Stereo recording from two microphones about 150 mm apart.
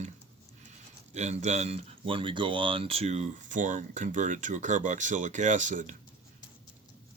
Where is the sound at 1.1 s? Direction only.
50° right (ahead or behind).